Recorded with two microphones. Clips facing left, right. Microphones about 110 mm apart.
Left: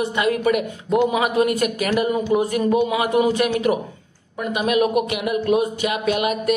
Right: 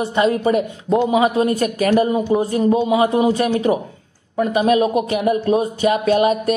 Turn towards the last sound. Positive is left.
turn(degrees=-35)  # may be behind; listen again after turning